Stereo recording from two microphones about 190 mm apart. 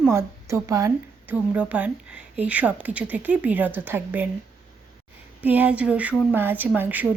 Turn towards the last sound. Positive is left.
turn(degrees=-10)  # may be behind; listen again after turning